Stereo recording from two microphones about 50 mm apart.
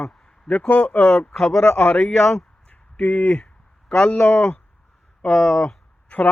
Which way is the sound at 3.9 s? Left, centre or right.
Left.